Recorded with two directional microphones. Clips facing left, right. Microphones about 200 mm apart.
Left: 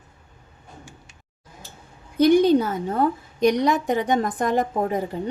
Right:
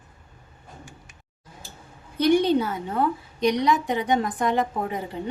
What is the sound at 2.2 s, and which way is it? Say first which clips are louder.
A woman's voice: left 4 dB; 45° left (ahead or behind).